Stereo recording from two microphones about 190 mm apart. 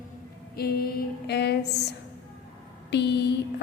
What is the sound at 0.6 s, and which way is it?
A woman's voice, 55° left (ahead or behind).